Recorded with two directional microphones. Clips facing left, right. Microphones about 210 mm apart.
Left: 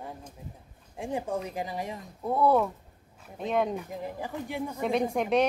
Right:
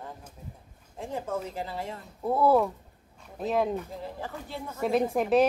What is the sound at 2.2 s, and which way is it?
A woman's voice, 5° right (ahead or behind).